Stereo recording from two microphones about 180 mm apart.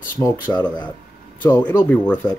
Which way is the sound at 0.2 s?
10° left (ahead or behind).